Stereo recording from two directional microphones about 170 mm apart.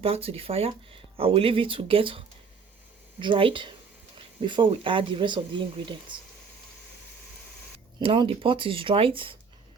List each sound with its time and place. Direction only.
0.0 s speech: 35° right (ahead or behind)
7.9 s speech: 30° right (ahead or behind)